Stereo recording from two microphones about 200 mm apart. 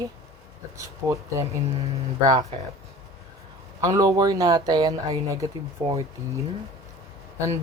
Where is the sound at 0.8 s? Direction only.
15° right (ahead or behind).